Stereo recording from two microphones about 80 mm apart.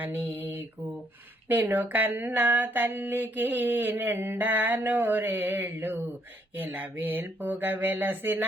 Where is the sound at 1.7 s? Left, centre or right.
Right.